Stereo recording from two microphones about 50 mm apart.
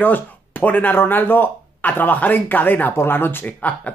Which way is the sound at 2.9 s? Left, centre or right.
Left.